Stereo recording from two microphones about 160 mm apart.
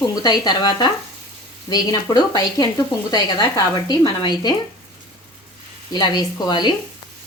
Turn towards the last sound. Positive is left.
turn(degrees=25)  # may be behind; listen again after turning